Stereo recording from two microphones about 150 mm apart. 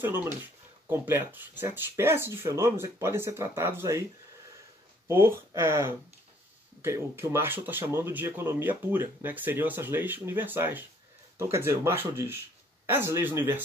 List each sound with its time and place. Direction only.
0.4 s speech: 15° right (ahead or behind)
5.0 s speech: 15° right (ahead or behind)